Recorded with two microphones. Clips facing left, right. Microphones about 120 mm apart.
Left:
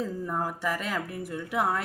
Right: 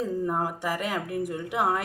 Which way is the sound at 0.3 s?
20° right (ahead or behind).